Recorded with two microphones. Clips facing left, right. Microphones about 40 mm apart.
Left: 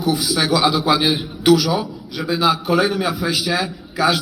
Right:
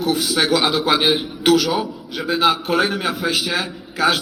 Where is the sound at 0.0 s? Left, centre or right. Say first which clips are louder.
Even; right.